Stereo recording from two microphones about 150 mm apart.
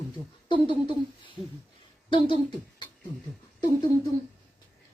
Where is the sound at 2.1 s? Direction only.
35° left (ahead or behind).